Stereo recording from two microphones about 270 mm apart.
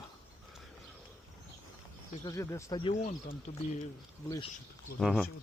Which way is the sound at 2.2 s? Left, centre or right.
Centre.